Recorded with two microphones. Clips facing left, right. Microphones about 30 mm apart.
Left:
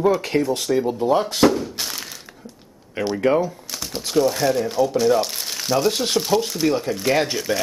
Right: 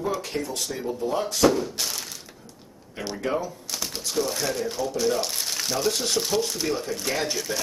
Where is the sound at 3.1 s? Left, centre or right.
Left.